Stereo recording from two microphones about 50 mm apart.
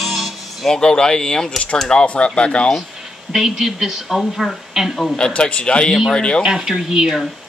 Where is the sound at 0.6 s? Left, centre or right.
Centre.